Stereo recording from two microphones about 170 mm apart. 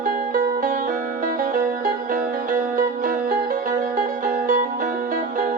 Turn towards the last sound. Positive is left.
turn(degrees=-55)  # may be behind; listen again after turning